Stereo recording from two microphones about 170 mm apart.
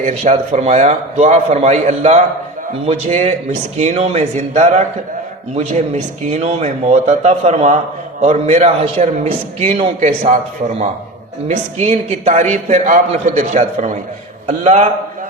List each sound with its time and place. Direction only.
0.0 s a man's voice: 45° right (ahead or behind)